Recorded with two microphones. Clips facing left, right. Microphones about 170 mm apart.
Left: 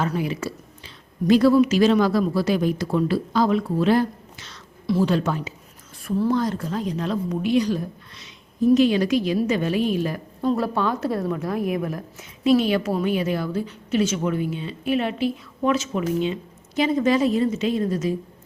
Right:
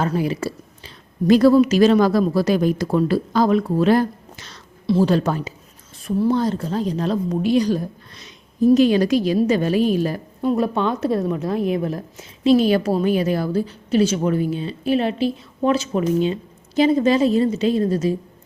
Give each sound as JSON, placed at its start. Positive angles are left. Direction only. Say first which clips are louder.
{"t": 0.0, "sound": "a woman's voice", "louder": "right 3 dB", "side_deg": -35}
{"t": 6.0, "sound": "a woman's voice", "louder": "right 3 dB", "side_deg": -20}
{"t": 10.4, "sound": "a woman's voice", "louder": "right 3 dB", "side_deg": -15}